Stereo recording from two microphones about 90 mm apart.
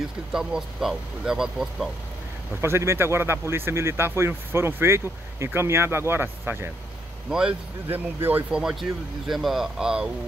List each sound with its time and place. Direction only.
0.3 s speech: 5° right (ahead or behind)
2.6 s speech: 30° right (ahead or behind)
7.2 s speech: 10° right (ahead or behind)
7.9 s speech: 20° right (ahead or behind)
8.5 s speech: 10° right (ahead or behind)